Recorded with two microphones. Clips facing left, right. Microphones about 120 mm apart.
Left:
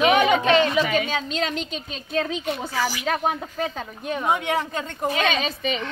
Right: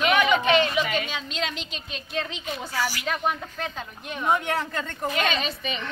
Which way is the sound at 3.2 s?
40° left (ahead or behind).